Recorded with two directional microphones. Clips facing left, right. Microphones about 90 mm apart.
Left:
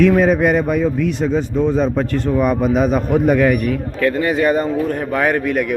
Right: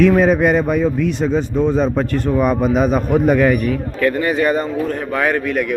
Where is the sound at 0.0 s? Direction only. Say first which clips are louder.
Even; 35° right (ahead or behind); by 2.4 s 10° right (ahead or behind).